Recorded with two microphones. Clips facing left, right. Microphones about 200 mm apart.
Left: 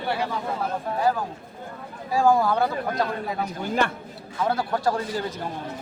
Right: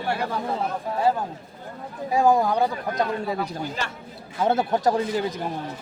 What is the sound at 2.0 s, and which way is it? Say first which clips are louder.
Speech: right 1 dB; 20° right (ahead or behind).